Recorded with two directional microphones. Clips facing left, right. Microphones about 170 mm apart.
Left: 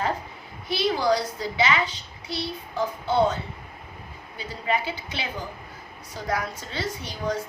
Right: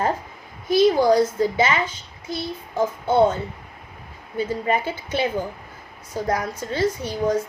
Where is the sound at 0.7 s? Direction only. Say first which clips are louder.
Right 7 dB; 45° right (ahead or behind).